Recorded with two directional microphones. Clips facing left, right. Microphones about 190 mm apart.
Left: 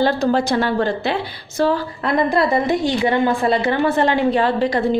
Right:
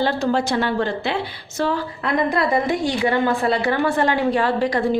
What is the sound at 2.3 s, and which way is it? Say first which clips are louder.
A woman's voice: left 3 dB; 25° left (ahead or behind).